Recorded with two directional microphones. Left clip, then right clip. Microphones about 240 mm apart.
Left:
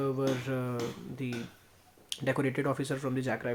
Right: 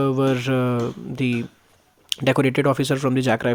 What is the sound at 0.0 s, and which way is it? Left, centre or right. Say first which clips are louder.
Speech: right 11 dB; right.